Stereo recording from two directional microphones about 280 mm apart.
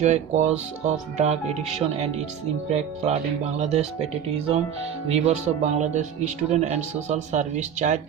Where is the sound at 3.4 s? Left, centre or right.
Right.